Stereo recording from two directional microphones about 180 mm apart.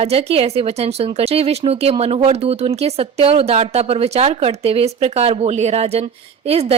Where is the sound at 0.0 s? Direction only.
35° right (ahead or behind).